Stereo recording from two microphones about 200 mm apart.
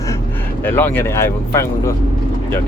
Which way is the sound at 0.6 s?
10° left (ahead or behind).